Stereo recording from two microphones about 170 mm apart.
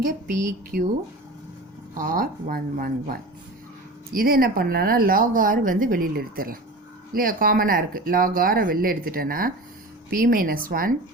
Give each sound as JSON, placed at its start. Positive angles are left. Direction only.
{"t": 0.0, "sound": "a woman's voice", "side_deg": -50}
{"t": 2.0, "sound": "speech", "side_deg": -55}